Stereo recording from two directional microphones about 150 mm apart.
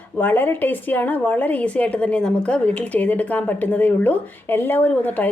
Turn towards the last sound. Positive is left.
turn(degrees=10)  # may be behind; listen again after turning